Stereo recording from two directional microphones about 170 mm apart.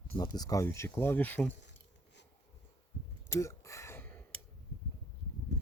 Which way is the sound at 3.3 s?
15° left (ahead or behind).